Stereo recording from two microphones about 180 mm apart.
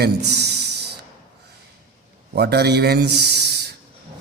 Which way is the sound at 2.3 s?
65° right (ahead or behind).